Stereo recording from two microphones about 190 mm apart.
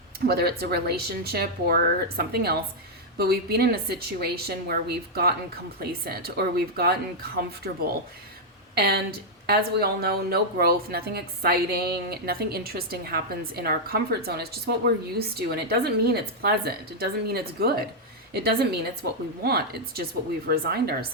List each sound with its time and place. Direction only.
0.3 s a woman's voice: 55° right (ahead or behind)